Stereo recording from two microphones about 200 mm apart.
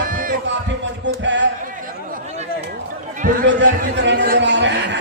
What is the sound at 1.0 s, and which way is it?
Music, 65° right (ahead or behind).